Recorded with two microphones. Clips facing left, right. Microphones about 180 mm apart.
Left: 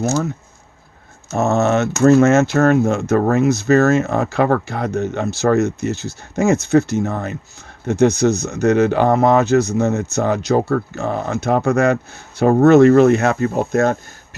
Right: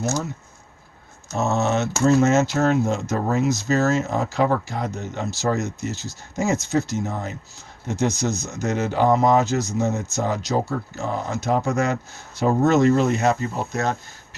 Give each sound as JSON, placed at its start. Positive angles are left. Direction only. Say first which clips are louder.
{"t": 1.4, "sound": "speech", "louder": "left 6 dB", "side_deg": 55}